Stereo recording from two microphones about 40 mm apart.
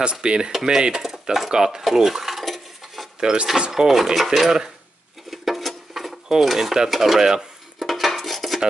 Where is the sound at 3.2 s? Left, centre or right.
Centre.